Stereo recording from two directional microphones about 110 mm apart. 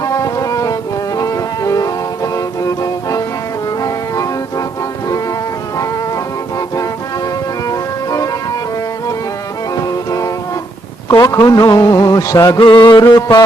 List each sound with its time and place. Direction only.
0.0 s brass instrument: 30° left (ahead or behind)
3.8 s music: 30° left (ahead or behind)
7.7 s music: 30° left (ahead or behind)
9.7 s music: 30° left (ahead or behind)
11.1 s a man's voice: 35° left (ahead or behind)
12.5 s a man's voice: 45° left (ahead or behind)